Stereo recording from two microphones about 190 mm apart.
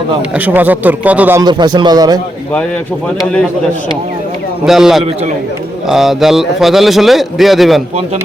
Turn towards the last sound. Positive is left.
turn(degrees=0)  # may be behind; listen again after turning